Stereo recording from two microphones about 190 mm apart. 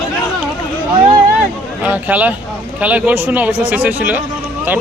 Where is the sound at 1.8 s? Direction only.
10° right (ahead or behind).